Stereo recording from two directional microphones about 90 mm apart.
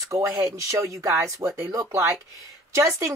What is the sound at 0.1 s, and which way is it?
Speech, 40° right (ahead or behind).